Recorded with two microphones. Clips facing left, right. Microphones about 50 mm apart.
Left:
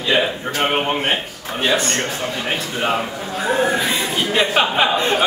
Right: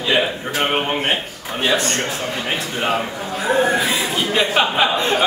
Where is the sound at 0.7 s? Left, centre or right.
Centre.